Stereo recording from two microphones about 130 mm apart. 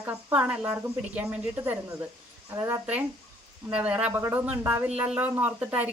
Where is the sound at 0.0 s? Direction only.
10° right (ahead or behind).